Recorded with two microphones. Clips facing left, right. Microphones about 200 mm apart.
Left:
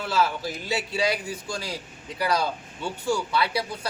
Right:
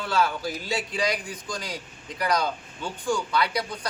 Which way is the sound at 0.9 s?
25° left (ahead or behind).